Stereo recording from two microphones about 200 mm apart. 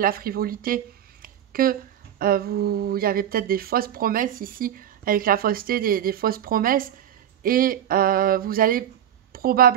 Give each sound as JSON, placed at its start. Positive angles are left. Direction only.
{"t": 0.0, "sound": "a woman's voice", "side_deg": -45}